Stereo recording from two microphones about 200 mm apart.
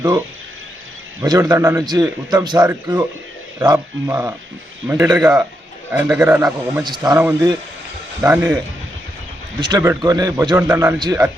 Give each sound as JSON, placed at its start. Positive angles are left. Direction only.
{"t": 1.2, "sound": "a man's voice", "side_deg": -15}
{"t": 5.0, "sound": "a man's voice", "side_deg": -5}
{"t": 6.8, "sound": "a man's voice", "side_deg": -20}
{"t": 9.6, "sound": "a man's voice", "side_deg": -20}